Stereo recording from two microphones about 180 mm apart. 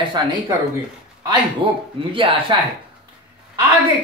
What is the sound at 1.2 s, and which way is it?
Speech, 25° right (ahead or behind).